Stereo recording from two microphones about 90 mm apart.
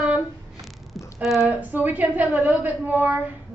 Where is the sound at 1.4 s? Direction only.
20° right (ahead or behind).